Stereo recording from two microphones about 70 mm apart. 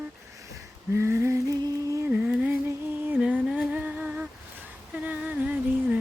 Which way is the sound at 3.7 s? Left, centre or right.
Centre.